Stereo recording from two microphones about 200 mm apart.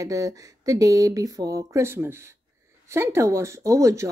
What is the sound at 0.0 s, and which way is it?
Speech, 15° right (ahead or behind).